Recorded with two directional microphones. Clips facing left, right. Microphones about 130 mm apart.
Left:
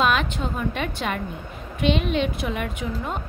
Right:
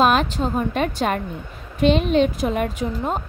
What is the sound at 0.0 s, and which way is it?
A woman's voice, 40° right (ahead or behind).